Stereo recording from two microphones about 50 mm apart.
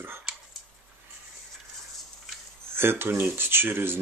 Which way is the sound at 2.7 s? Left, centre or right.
Right.